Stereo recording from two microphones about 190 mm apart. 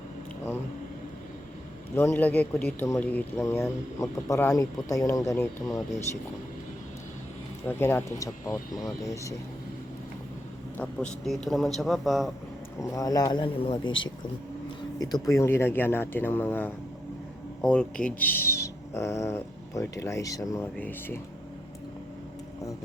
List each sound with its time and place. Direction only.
2.0 s speech: 10° left (ahead or behind)
7.7 s speech: 10° left (ahead or behind)
10.8 s a man's voice: 5° left (ahead or behind)
12.8 s speech: 20° left (ahead or behind)
14.9 s speech: 20° left (ahead or behind)